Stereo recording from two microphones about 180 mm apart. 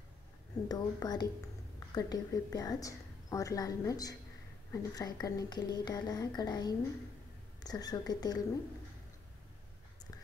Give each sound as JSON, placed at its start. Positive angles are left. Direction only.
{"t": 0.7, "sound": "a woman's voice", "side_deg": 20}